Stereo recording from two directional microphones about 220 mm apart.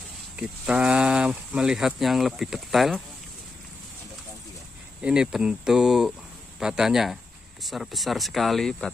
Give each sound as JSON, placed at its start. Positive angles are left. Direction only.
{"t": 0.4, "sound": "speech", "side_deg": -5}
{"t": 5.0, "sound": "speech", "side_deg": -5}